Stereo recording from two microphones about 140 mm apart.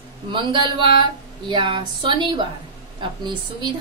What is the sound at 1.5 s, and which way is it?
A woman's voice, 35° right (ahead or behind).